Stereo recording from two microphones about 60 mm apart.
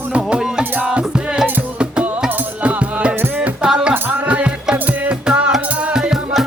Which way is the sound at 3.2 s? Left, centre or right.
Right.